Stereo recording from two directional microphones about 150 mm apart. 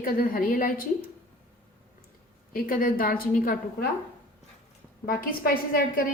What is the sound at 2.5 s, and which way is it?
A woman's voice, 70° left (ahead or behind).